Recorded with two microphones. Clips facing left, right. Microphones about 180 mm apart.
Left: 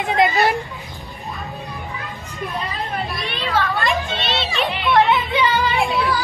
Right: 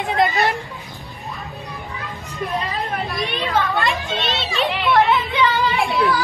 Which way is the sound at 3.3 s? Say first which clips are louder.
Even; 15° right (ahead or behind).